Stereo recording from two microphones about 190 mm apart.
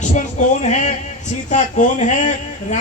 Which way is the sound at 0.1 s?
40° left (ahead or behind).